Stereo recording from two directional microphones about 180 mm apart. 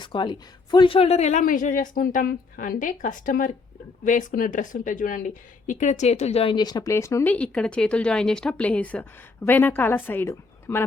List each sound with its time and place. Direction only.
0.0 s a woman's voice: 25° left (ahead or behind)